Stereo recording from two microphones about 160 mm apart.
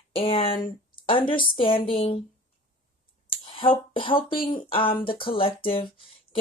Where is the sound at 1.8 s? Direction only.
30° left (ahead or behind).